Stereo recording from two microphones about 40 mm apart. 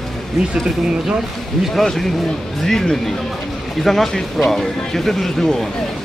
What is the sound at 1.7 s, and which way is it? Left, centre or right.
Speech, centre.